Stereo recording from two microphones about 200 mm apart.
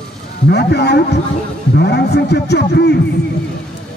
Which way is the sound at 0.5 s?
55° left (ahead or behind).